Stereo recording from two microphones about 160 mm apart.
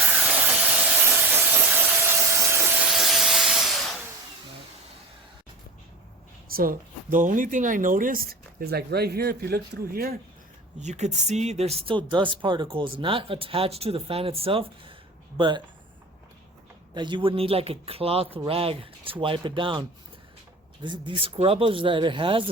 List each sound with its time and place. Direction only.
0.1 s steam: 10° right (ahead or behind)
6.5 s speech: 65° right (ahead or behind)
10.8 s speech: 45° right (ahead or behind); by 15.6 s 30° right (ahead or behind)
16.9 s speech: 30° right (ahead or behind)
20.8 s speech: 30° right (ahead or behind)